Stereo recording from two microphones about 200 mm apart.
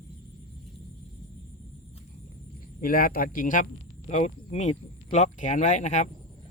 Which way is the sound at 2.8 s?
45° left (ahead or behind).